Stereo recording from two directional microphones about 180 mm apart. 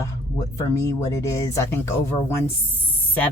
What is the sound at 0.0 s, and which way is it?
Speech, 15° left (ahead or behind).